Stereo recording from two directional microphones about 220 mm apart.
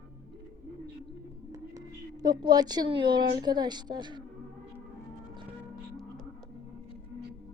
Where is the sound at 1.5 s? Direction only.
15° right (ahead or behind).